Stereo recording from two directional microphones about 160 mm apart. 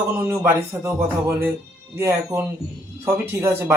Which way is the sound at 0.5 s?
15° right (ahead or behind).